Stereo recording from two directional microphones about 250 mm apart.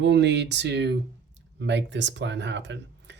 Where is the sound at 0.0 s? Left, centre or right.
Right.